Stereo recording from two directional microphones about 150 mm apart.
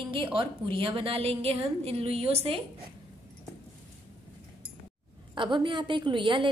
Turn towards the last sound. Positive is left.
turn(degrees=-35)  # may be behind; listen again after turning